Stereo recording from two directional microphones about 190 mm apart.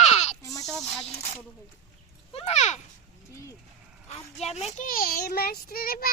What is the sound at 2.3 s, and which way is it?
Speech, 35° left (ahead or behind).